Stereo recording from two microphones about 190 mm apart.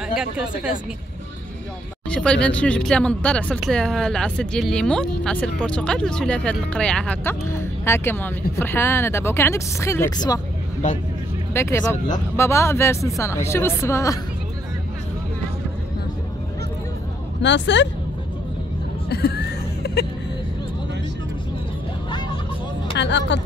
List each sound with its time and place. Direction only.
0.1 s speech: 5° right (ahead or behind)
2.0 s speech: 5° left (ahead or behind)
11.5 s speech: 15° left (ahead or behind)
17.4 s speech: 70° left (ahead or behind)
19.0 s a sound: 60° left (ahead or behind)
22.9 s speech: 70° left (ahead or behind)